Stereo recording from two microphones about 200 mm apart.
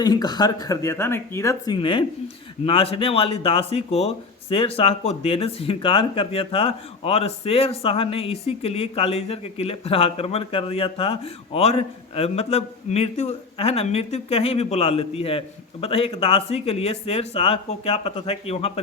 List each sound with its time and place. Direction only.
0.0 s speech: 20° left (ahead or behind)